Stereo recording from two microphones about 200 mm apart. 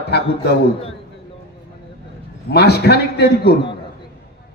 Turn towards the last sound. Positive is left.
turn(degrees=55)  # may be behind; listen again after turning